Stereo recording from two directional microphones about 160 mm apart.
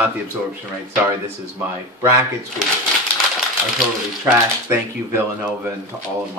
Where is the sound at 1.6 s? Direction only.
15° right (ahead or behind).